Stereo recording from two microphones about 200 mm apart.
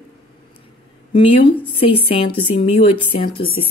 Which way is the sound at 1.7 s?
25° left (ahead or behind).